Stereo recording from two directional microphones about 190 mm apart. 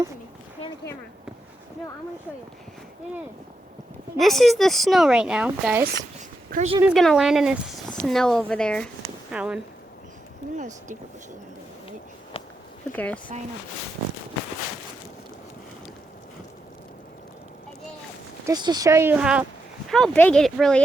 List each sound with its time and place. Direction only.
4.2 s speech: centre (ahead or behind)
6.5 s speech: 50° right (ahead or behind)
6.8 s speech: centre (ahead or behind)
9.3 s speech: 5° right (ahead or behind)
12.4 s a sound: 30° left (ahead or behind)
12.9 s speech: 10° left (ahead or behind)
18.4 s speech: 20° right (ahead or behind); by 19.5 s 5° right (ahead or behind)
19.9 s speech: 5° left (ahead or behind)